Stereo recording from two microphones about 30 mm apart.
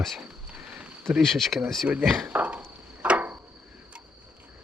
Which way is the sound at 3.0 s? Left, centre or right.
Right.